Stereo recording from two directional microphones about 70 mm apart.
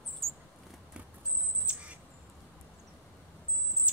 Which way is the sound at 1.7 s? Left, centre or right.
Centre.